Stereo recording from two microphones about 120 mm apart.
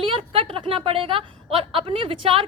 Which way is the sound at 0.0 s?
50° right (ahead or behind).